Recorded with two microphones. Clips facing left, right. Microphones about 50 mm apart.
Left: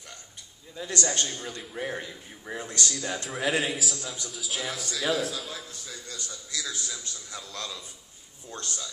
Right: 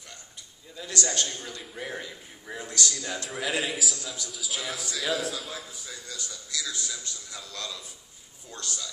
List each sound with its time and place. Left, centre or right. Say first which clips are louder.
0.8 s a man's voice: left 1 dB; left
1.6 s a man's voice: left 5 dB; centre
2.0 s a man's voice: left 1 dB; centre
2.6 s a man's voice: right 1 dB; left
3.3 s a man's voice: left 2 dB; centre
6.0 s a man's voice: even; left